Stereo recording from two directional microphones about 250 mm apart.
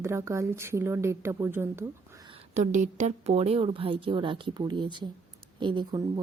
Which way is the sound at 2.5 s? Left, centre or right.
Right.